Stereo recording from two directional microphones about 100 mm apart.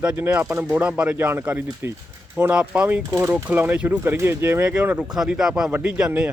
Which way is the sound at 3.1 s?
25° right (ahead or behind).